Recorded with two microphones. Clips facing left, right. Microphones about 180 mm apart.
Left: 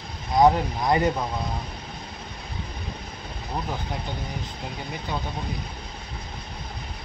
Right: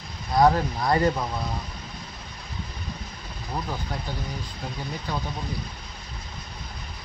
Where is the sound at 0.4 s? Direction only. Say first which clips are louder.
Left 1 dB; 15° left (ahead or behind).